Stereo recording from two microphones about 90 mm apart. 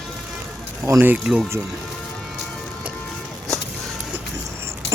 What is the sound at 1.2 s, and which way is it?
Speech, 10° right (ahead or behind).